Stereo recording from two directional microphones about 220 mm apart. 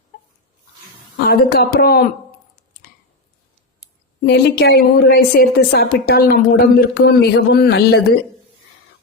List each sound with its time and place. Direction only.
1.1 s a woman's voice: 45° left (ahead or behind)
4.2 s a woman's voice: 45° left (ahead or behind)